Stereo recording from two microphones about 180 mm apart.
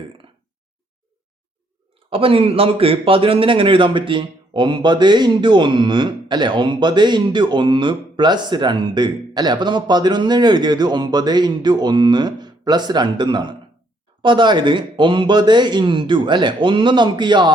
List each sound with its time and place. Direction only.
2.0 s a man's voice: 30° right (ahead or behind)